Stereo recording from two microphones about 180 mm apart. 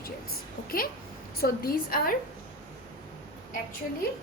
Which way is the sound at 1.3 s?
55° left (ahead or behind).